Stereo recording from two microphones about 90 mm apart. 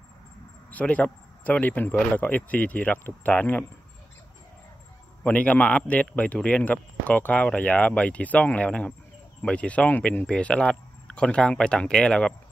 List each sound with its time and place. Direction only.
0.7 s a man's voice: 15° left (ahead or behind)
5.2 s a man's voice: 20° left (ahead or behind)